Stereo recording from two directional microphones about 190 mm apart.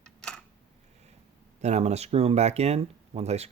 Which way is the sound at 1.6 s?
35° right (ahead or behind).